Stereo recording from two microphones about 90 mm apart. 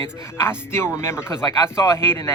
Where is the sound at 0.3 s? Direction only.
30° left (ahead or behind).